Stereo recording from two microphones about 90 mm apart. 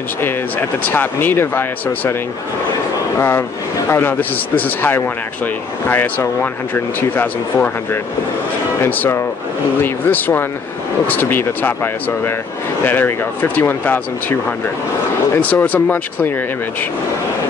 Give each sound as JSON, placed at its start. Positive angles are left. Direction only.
{"t": 0.2, "sound": "speech", "side_deg": 20}
{"t": 3.2, "sound": "speech", "side_deg": 25}